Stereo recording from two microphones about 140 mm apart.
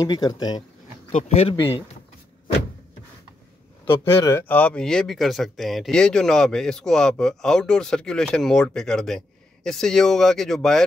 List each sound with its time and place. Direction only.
0.0 s speech: 30° left (ahead or behind)
1.1 s speech: 45° left (ahead or behind)
3.8 s speech: 20° left (ahead or behind); by 10.8 s 5° left (ahead or behind)